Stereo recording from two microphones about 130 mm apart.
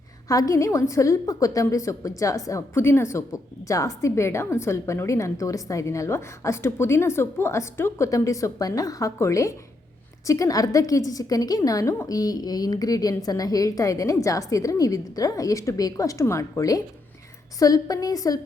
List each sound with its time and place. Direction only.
0.3 s a woman's voice: 25° left (ahead or behind)